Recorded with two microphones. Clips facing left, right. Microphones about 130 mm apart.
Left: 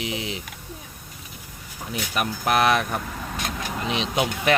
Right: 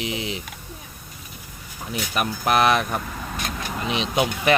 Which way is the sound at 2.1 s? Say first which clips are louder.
Right 1 dB; 25° right (ahead or behind).